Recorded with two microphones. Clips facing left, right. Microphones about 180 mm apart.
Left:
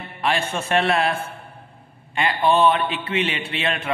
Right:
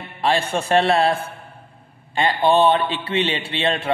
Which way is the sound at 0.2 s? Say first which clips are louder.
Right 3 dB; 35° right (ahead or behind).